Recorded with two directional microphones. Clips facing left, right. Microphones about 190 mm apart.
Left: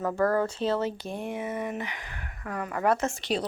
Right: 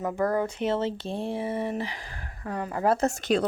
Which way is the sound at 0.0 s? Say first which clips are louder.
Left 1 dB; 15° right (ahead or behind).